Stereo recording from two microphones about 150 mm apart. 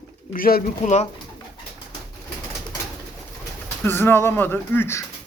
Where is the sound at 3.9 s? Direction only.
15° left (ahead or behind).